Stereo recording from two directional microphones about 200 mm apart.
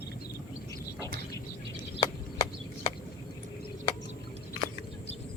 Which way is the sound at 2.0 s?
20° left (ahead or behind).